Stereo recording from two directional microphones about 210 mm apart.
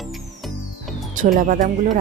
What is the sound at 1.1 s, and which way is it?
Speech, 40° right (ahead or behind).